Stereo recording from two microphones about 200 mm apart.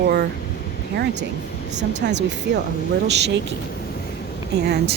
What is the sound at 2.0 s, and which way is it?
Speech, 55° right (ahead or behind).